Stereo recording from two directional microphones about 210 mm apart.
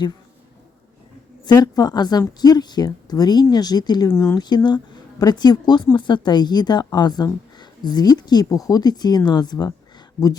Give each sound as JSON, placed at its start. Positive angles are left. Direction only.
{"t": 1.5, "sound": "speech", "side_deg": 20}